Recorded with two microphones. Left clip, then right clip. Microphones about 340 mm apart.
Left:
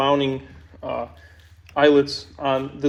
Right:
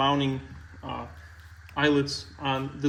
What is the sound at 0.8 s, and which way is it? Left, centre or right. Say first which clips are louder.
Speech: left 9 dB; left.